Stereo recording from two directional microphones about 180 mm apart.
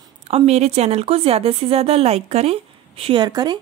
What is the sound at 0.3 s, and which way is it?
Speech, 35° right (ahead or behind).